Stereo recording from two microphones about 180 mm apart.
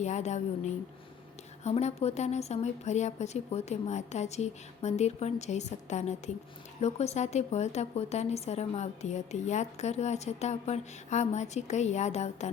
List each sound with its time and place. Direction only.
0.0 s a woman's voice: 40° left (ahead or behind)